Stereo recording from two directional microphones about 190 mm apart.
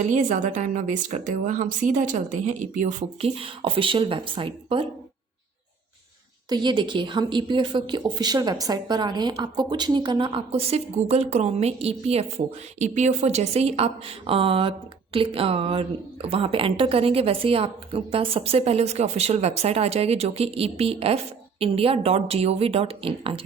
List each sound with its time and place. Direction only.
0.1 s a woman's voice: 40° right (ahead or behind)
6.5 s a woman's voice: 25° right (ahead or behind)